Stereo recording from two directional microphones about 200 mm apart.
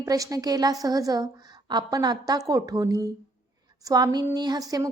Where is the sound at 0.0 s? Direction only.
15° right (ahead or behind).